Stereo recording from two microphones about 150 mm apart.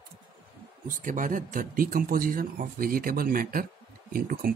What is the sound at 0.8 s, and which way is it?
Speech, 60° right (ahead or behind).